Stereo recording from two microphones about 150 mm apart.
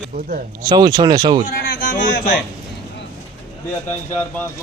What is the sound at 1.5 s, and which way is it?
Speech, 70° left (ahead or behind).